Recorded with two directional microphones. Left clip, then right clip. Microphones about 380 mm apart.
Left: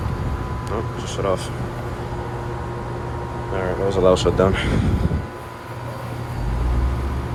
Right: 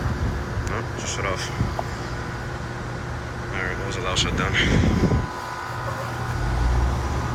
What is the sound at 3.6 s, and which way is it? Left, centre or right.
Speech, centre.